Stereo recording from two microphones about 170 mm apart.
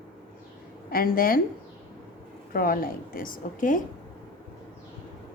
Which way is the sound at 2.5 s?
55° left (ahead or behind).